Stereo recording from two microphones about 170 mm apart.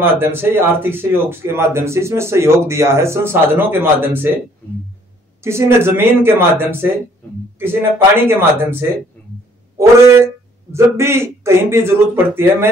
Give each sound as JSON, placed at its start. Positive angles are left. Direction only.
{"t": 0.0, "sound": "a man's voice", "side_deg": -15}
{"t": 5.4, "sound": "a man's voice", "side_deg": -15}